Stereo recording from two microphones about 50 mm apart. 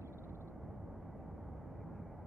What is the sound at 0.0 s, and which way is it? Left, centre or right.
Vehicle, right.